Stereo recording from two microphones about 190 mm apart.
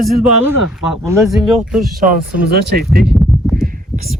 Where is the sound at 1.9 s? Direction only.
50° right (ahead or behind).